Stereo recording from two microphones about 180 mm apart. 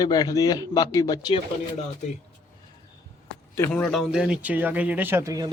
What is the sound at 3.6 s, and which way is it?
Speech, 5° left (ahead or behind).